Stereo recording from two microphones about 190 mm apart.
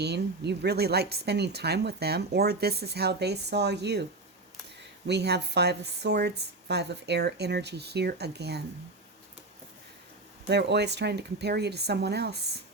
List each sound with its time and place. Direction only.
0.0 s speech: 60° right (ahead or behind)
10.5 s speech: 60° right (ahead or behind)